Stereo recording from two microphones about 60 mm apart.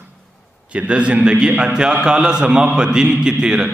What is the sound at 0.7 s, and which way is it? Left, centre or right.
A man's voice, right.